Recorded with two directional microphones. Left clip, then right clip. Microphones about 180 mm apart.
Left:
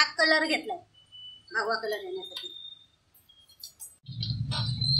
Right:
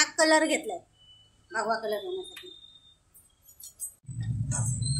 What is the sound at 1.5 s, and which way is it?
Speech, 50° right (ahead or behind).